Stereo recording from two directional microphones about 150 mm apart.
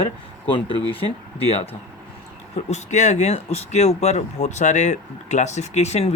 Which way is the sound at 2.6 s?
50° left (ahead or behind).